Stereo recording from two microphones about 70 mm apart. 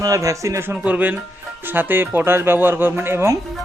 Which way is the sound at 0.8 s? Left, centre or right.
Right.